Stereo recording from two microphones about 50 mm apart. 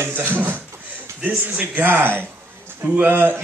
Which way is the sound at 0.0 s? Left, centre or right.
Right.